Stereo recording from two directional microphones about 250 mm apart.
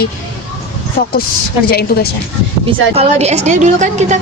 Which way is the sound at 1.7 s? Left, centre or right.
Left.